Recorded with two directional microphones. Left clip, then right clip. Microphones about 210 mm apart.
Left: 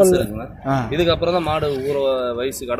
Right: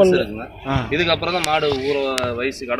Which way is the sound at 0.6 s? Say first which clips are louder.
Left 1 dB; 55° left (ahead or behind).